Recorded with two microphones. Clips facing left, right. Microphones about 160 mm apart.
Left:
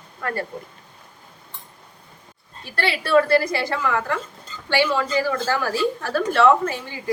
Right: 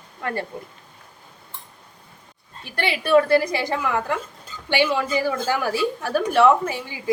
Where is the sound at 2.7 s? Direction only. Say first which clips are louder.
Right 1 dB; 15° right (ahead or behind).